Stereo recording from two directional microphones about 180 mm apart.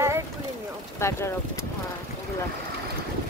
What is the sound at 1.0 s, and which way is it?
Speech, 15° left (ahead or behind).